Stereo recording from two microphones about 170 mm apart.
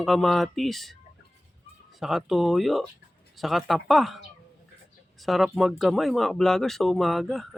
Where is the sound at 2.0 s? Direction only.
Centre (ahead or behind).